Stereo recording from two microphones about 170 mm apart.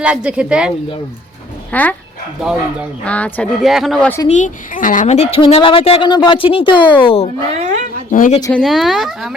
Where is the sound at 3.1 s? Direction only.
10° left (ahead or behind).